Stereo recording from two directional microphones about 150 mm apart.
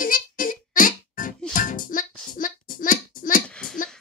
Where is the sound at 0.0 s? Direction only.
65° left (ahead or behind).